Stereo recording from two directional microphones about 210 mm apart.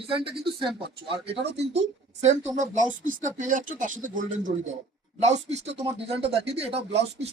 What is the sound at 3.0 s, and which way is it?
A man's voice, 40° right (ahead or behind).